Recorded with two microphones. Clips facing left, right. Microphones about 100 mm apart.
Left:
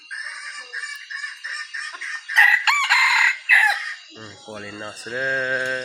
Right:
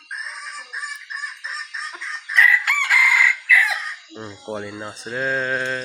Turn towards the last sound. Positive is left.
turn(degrees=5)  # may be behind; listen again after turning